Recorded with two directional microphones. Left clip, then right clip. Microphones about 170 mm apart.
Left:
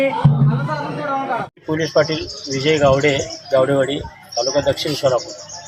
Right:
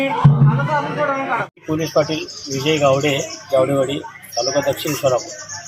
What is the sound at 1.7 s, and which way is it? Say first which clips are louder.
Speech: left 1 dB; centre (ahead or behind).